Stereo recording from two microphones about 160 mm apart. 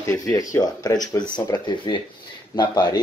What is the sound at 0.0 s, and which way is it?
Speech, 20° left (ahead or behind).